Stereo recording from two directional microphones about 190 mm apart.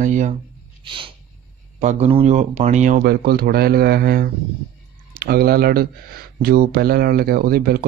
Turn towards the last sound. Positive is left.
turn(degrees=-55)  # may be behind; listen again after turning